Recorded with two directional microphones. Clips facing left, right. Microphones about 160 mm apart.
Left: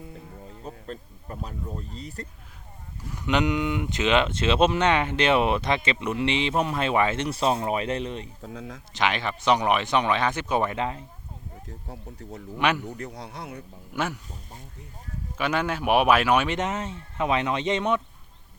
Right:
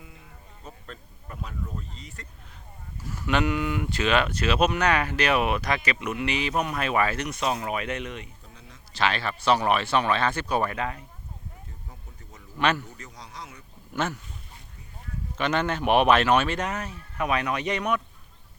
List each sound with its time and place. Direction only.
0.6 s speech: 35° left (ahead or behind)
3.1 s speech: 15° left (ahead or behind)
8.4 s speech: 90° left
8.9 s speech: 15° left (ahead or behind)
12.2 s speech: 70° left (ahead or behind)
12.5 s speech: 15° left (ahead or behind)
13.0 s speech: 60° left (ahead or behind)
13.9 s speech: 10° left (ahead or behind)
15.4 s speech: 10° left (ahead or behind); by 18.0 s 25° left (ahead or behind)